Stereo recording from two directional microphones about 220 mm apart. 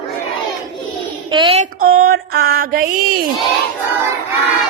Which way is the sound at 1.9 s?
45° right (ahead or behind).